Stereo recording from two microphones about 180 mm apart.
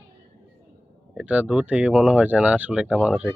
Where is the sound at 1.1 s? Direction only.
5° right (ahead or behind).